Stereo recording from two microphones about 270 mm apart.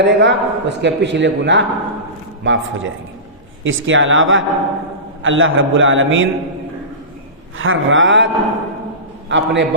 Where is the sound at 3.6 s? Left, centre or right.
Right.